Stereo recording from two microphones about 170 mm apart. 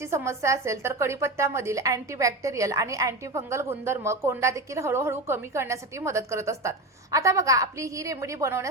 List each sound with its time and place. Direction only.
0.0 s a woman's voice: 15° right (ahead or behind)